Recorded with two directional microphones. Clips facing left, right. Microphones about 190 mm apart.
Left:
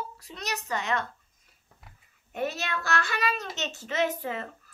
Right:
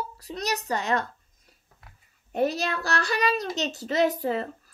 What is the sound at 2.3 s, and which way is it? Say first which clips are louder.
A child's voice: right 6 dB; 35° right (ahead or behind).